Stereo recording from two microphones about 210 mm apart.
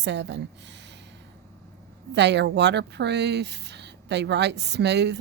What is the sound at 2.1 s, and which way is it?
Speech, 55° right (ahead or behind).